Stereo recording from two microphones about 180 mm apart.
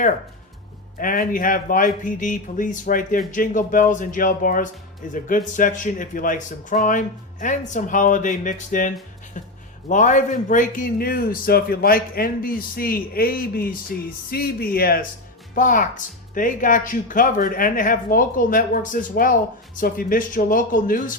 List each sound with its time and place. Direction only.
0.9 s a man's voice: 50° left (ahead or behind)
9.9 s a man's voice: 45° left (ahead or behind)